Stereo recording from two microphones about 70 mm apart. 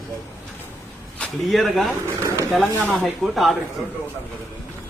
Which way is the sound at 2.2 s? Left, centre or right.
Right.